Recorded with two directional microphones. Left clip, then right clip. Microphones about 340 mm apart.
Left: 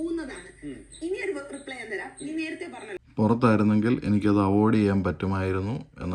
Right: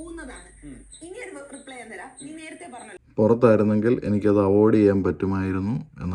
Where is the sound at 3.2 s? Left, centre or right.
Centre.